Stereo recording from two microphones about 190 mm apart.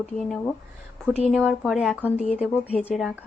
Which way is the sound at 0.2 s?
Centre (ahead or behind).